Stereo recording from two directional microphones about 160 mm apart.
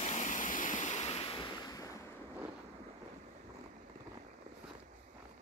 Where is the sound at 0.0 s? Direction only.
50° left (ahead or behind); by 1.9 s 25° left (ahead or behind).